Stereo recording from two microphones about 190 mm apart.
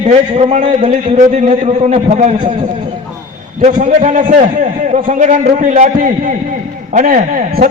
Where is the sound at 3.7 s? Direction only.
40° right (ahead or behind).